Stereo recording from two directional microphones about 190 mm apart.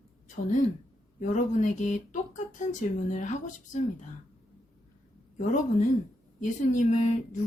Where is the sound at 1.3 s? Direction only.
40° left (ahead or behind).